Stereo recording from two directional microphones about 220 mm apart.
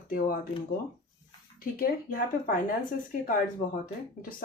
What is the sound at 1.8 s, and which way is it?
Speech, 40° left (ahead or behind).